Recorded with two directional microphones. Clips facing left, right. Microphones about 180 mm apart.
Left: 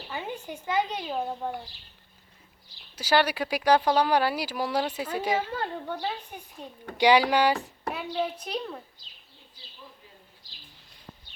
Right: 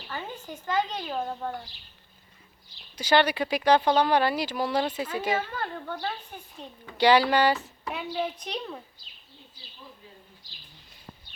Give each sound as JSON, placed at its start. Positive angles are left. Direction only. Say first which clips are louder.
{"t": 0.1, "sound": "speech", "louder": "left 2 dB", "side_deg": 15}
{"t": 2.9, "sound": "speech", "louder": "right 1 dB", "side_deg": 5}
{"t": 7.9, "sound": "a woman's voice", "louder": "even", "side_deg": 0}